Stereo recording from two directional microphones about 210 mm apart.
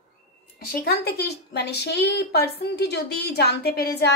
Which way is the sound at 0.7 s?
45° left (ahead or behind).